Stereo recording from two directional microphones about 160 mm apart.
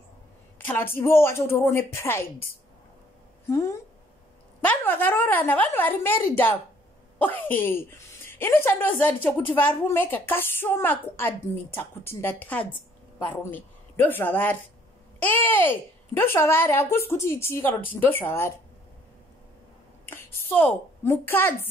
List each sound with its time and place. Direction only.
0.6 s a woman's voice: 10° left (ahead or behind)
3.4 s a woman's voice: 20° left (ahead or behind)
20.1 s a woman's voice: 10° left (ahead or behind)